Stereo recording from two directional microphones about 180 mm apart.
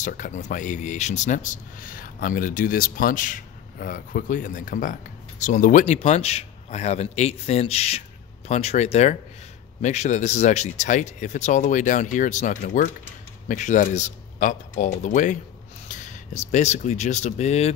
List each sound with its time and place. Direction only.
0.0 s speech: 45° left (ahead or behind)